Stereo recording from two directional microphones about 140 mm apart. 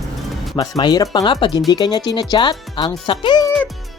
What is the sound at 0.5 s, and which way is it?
Speech, 30° left (ahead or behind).